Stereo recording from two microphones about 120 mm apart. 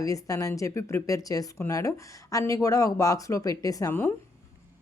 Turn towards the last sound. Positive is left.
turn(degrees=30)  # may be behind; listen again after turning